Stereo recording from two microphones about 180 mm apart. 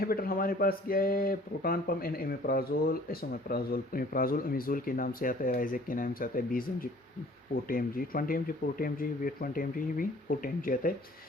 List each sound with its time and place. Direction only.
0.0 s speech: 55° left (ahead or behind)